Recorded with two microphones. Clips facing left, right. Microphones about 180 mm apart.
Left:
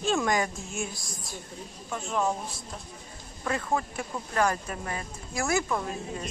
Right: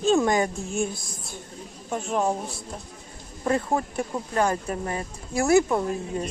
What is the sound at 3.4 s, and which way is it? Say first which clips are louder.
Speech: right 5 dB; 30° right (ahead or behind).